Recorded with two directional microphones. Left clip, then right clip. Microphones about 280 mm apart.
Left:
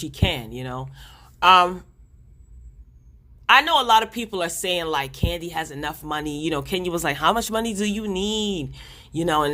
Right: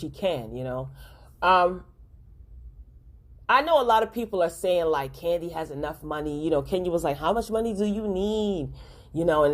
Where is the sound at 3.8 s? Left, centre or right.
Left.